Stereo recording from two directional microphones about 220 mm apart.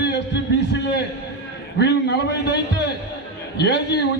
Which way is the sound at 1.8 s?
50° left (ahead or behind).